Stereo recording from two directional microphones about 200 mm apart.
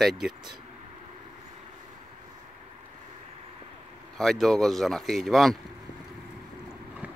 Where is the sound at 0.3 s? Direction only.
20° right (ahead or behind).